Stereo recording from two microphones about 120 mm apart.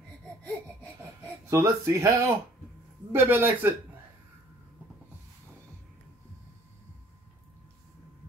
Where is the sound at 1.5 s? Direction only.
25° right (ahead or behind).